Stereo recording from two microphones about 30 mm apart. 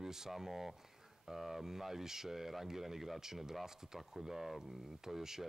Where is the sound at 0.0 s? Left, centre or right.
Centre.